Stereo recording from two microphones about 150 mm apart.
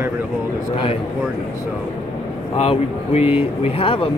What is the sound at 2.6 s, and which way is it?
Speech, 40° left (ahead or behind).